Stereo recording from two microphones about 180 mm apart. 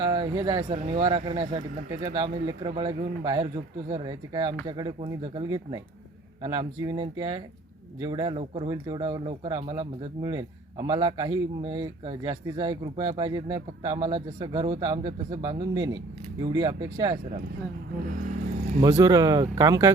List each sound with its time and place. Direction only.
0.0 s speech: 25° right (ahead or behind)
18.1 s vehicle: 45° right (ahead or behind)
18.8 s speech: 25° right (ahead or behind)